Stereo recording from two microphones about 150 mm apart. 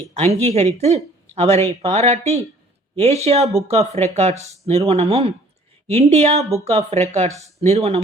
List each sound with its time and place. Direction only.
0.1 s speech: 45° right (ahead or behind)